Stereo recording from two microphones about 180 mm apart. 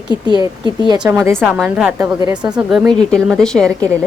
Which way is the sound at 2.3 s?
5° right (ahead or behind).